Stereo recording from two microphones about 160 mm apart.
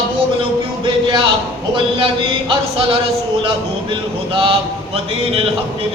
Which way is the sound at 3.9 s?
35° right (ahead or behind).